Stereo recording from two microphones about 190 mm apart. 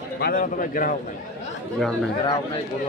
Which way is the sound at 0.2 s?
45° left (ahead or behind).